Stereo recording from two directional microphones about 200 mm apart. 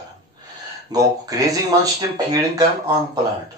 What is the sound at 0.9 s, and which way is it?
Speech, 20° right (ahead or behind).